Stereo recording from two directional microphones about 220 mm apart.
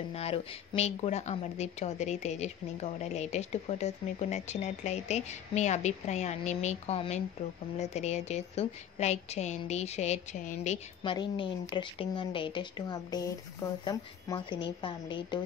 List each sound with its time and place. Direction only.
0.1 s a woman's voice: 25° left (ahead or behind)
11.1 s speech: 20° left (ahead or behind)